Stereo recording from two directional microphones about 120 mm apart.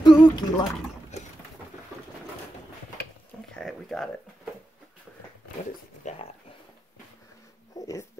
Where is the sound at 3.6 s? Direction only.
Centre (ahead or behind).